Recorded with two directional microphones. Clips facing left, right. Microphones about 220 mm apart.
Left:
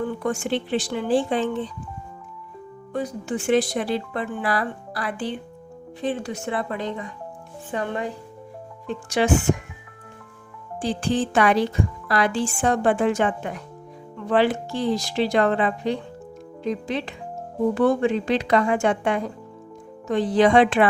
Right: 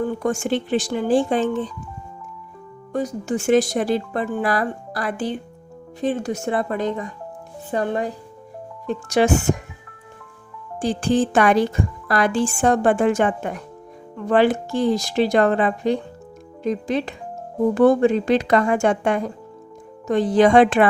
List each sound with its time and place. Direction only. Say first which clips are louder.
0.0 s speech: right 3 dB; 45° right (ahead or behind)
2.9 s speech: right 4 dB; 45° right (ahead or behind)
10.8 s speech: right 4 dB; 45° right (ahead or behind)